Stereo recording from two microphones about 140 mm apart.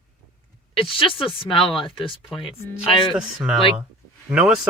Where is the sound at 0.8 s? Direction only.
40° left (ahead or behind).